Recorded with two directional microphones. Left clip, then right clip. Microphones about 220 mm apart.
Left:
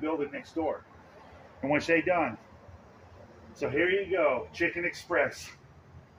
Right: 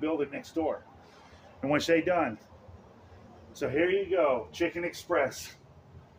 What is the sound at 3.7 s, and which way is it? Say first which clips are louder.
A man's voice: even; 10° right (ahead or behind).